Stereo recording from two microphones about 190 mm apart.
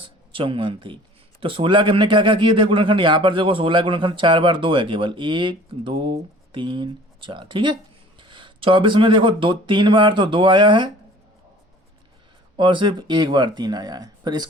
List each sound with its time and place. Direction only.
0.0 s a sound: 25° right (ahead or behind)
1.4 s a man's voice: 25° right (ahead or behind)
12.5 s a man's voice: 25° right (ahead or behind)